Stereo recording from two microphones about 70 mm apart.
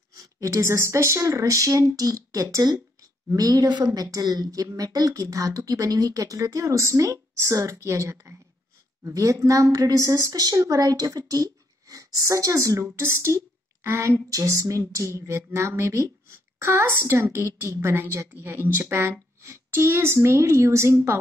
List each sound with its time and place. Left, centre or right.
0.1 s speech: right
12.9 s speech: right